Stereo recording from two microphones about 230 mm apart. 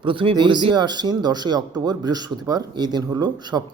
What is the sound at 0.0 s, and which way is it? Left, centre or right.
Speech, right.